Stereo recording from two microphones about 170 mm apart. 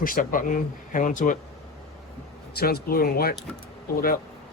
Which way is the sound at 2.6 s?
65° left (ahead or behind).